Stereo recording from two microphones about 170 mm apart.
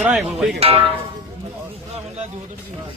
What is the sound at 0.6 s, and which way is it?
Speech, 35° right (ahead or behind).